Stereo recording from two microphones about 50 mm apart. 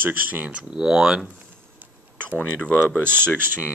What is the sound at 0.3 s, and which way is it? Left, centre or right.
Speech, right.